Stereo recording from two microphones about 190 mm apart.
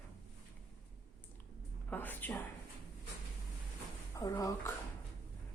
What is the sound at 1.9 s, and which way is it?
Speech, 10° left (ahead or behind).